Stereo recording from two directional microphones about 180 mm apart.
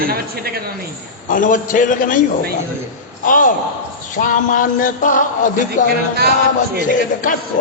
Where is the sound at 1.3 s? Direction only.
45° left (ahead or behind).